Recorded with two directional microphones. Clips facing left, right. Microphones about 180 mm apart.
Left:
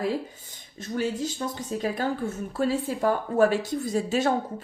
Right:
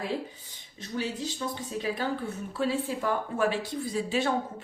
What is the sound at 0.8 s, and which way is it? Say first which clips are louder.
Speech: left 5 dB; 45° left (ahead or behind).